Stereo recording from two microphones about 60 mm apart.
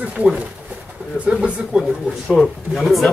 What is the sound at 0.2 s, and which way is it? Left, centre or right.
Speech, right.